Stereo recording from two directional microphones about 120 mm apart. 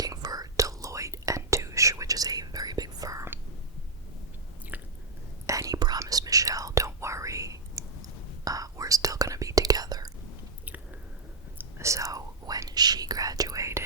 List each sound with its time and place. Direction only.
0.0 s whispering: 30° right (ahead or behind)
4.7 s biting: 15° right (ahead or behind)
5.5 s whispering: 30° right (ahead or behind)
11.5 s whispering: 25° right (ahead or behind)